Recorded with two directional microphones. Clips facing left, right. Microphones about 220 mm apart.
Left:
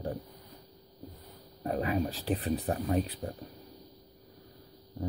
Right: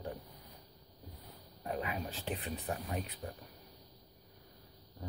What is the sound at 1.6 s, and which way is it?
Speech, 40° left (ahead or behind).